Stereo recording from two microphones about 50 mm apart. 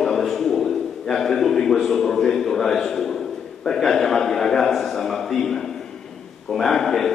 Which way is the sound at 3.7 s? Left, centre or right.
Centre.